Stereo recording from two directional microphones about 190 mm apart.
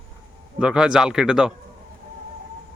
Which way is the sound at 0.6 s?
5° right (ahead or behind).